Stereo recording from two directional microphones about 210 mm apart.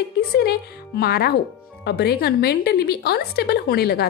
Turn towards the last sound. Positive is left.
turn(degrees=50)  # may be behind; listen again after turning